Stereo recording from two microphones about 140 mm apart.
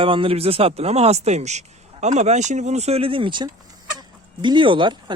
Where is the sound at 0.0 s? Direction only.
40° right (ahead or behind).